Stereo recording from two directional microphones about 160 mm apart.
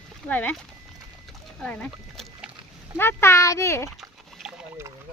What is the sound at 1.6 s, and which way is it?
A child's voice, 5° left (ahead or behind).